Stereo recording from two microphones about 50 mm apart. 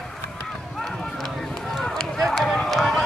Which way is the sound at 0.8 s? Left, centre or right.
Centre.